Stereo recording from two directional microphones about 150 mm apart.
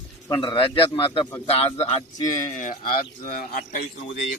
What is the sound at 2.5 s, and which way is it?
Speech, 65° left (ahead or behind).